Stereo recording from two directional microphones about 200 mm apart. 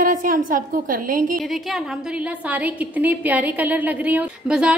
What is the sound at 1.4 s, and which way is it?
A woman's voice, centre (ahead or behind).